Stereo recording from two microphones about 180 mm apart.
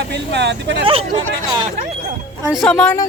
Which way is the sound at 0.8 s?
30° right (ahead or behind).